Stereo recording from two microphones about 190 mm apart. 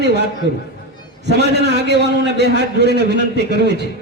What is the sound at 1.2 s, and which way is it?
A man's voice, 60° right (ahead or behind).